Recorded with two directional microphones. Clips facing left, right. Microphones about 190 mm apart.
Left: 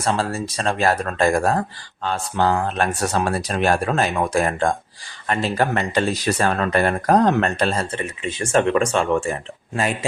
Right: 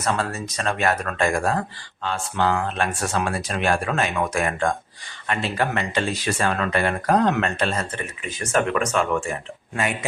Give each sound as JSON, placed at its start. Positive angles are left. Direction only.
{"t": 0.0, "sound": "speech", "side_deg": 30}